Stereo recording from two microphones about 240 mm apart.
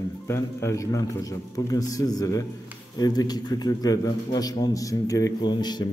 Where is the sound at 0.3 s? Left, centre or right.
Centre.